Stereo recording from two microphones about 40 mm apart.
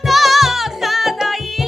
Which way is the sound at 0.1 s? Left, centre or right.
Centre.